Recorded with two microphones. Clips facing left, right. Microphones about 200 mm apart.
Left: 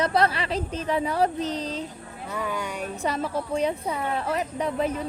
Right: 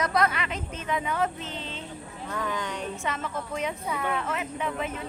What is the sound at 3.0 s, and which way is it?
Speech, 35° left (ahead or behind).